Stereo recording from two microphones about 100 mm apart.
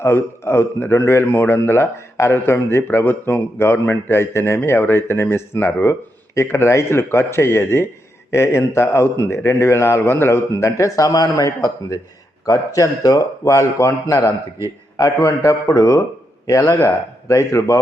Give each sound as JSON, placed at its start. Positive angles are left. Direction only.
{"t": 0.0, "sound": "a man's voice", "side_deg": 25}